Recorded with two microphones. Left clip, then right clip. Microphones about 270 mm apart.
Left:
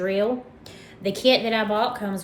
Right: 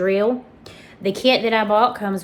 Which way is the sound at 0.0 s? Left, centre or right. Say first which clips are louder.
Right 5 dB; right.